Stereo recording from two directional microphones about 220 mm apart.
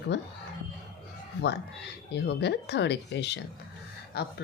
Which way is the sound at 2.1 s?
50° left (ahead or behind).